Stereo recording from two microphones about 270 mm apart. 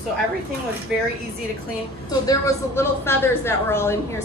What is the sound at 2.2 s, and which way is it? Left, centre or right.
Speech, centre.